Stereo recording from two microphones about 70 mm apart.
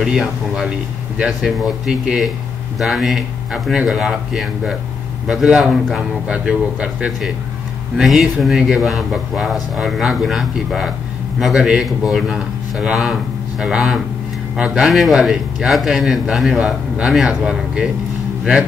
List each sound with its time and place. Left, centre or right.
0.0 s a man's voice: centre
6.2 s speech: centre
8.0 s a man's voice: centre
14.9 s a man's voice: centre